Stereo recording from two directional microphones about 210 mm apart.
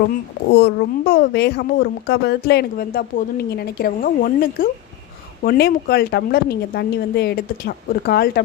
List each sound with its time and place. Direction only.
0.1 s speech: 45° left (ahead or behind)